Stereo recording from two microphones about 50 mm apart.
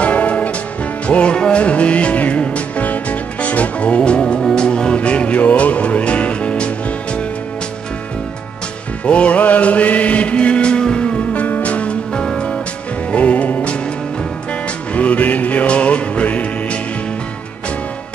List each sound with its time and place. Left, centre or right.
0.0 s music: left
4.4 s music: centre
4.6 s music: centre
9.0 s chant: left
11.4 s music: left
15.0 s music: left